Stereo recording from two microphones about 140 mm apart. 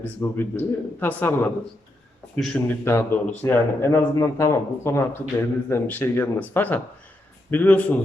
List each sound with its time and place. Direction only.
0.0 s speech: 15° left (ahead or behind)
2.3 s a man's voice: 5° left (ahead or behind)
2.6 s speech: 15° left (ahead or behind)